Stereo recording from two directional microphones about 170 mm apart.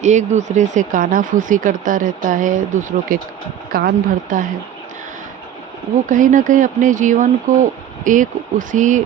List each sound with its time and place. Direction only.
0.0 s a woman's voice: 45° right (ahead or behind)
6.1 s speech: 50° right (ahead or behind)